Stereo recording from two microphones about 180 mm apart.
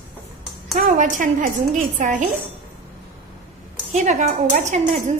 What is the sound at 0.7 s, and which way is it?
Music, 50° right (ahead or behind).